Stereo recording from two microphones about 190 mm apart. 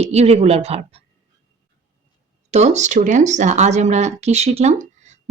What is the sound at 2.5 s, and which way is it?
Speech, 35° right (ahead or behind).